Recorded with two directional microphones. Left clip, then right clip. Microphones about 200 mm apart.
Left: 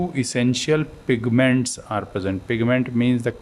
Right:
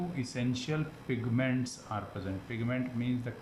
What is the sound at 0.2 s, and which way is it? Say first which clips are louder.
Speech: left 15 dB; 50° left (ahead or behind).